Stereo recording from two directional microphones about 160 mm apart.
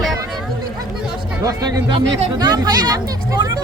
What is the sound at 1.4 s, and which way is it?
Speech, 20° right (ahead or behind).